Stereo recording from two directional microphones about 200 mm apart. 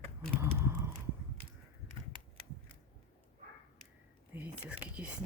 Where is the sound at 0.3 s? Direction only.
15° right (ahead or behind).